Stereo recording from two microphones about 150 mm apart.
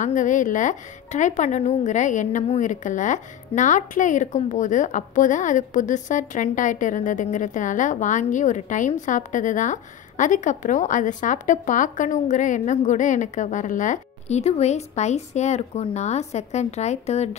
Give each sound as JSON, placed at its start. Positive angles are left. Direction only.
{"t": 0.0, "sound": "speech", "side_deg": 55}